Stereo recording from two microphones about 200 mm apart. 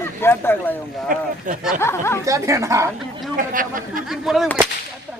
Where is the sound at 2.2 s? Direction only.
15° right (ahead or behind).